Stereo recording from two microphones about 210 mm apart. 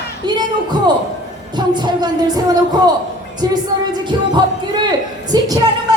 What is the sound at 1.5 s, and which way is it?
Speech, 20° right (ahead or behind).